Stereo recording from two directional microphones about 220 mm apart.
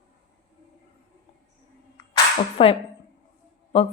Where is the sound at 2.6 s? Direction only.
25° left (ahead or behind).